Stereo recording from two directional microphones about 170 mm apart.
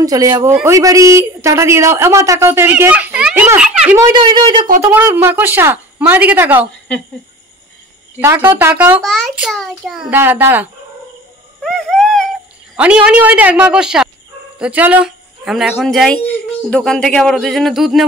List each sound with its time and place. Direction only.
0.0 s a woman's voice: 20° right (ahead or behind)
4.0 s a woman's voice: 25° right (ahead or behind)
4.8 s speech: 10° right (ahead or behind)
8.2 s speech: 15° right (ahead or behind)
9.0 s speech: centre (ahead or behind)
11.6 s a sound: centre (ahead or behind)
12.7 s speech: 5° right (ahead or behind)